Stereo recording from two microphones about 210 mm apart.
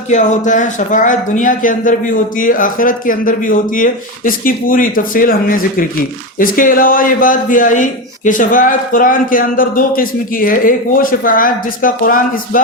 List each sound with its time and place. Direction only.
0.1 s a man's voice: 35° left (ahead or behind)